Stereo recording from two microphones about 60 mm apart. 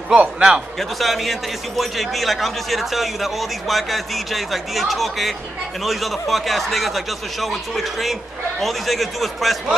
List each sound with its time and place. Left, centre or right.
0.1 s a man's voice: centre
0.7 s a man's voice: centre